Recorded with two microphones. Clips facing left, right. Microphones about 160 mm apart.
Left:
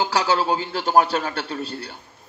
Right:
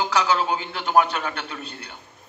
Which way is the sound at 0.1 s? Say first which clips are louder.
Left 1 dB; 35° left (ahead or behind).